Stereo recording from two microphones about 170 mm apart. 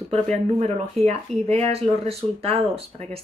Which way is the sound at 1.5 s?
35° right (ahead or behind).